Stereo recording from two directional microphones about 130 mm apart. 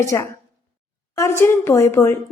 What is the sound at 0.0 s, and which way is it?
A woman's voice, 20° left (ahead or behind).